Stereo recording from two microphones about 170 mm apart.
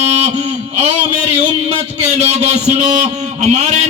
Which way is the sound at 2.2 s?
40° right (ahead or behind).